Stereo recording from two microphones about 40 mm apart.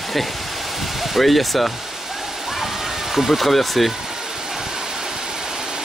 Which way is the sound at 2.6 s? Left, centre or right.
Centre.